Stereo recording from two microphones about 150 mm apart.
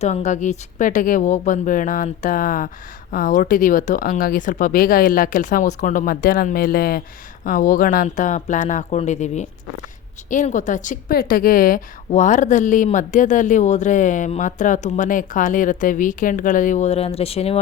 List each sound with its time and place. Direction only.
0.0 s a woman's voice: 50° left (ahead or behind); by 7.0 s 75° left (ahead or behind)
7.4 s a woman's voice: 60° left (ahead or behind); by 17.6 s 40° left (ahead or behind)